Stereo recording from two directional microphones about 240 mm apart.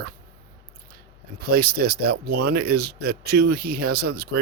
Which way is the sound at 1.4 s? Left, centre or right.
Right.